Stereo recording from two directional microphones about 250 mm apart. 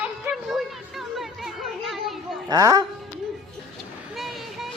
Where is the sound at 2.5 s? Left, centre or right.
Centre.